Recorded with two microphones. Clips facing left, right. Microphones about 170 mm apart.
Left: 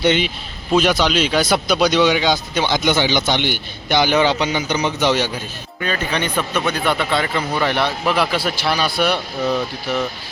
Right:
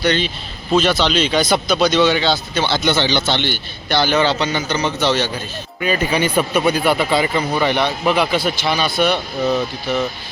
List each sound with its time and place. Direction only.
0.0 s speech: 20° left (ahead or behind)
5.8 s speech: 10° right (ahead or behind)